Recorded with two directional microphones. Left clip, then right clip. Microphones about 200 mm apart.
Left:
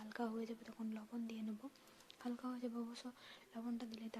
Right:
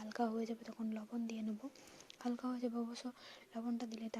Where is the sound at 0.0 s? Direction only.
20° right (ahead or behind).